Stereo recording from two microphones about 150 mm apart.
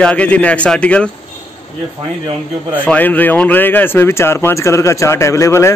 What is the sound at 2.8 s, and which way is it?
Speech, 10° left (ahead or behind).